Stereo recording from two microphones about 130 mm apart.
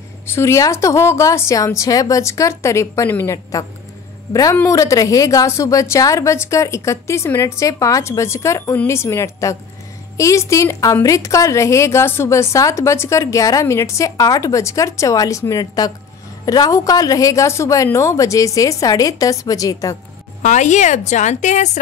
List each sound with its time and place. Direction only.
0.3 s a woman's voice: 20° left (ahead or behind)
20.4 s a woman's voice: 65° left (ahead or behind)